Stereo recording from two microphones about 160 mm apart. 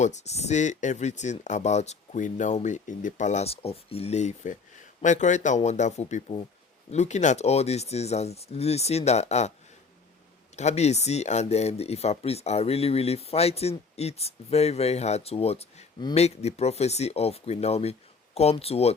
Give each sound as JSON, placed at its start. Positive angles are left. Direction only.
{"t": 0.0, "sound": "speech", "side_deg": 45}
{"t": 10.6, "sound": "speech", "side_deg": 45}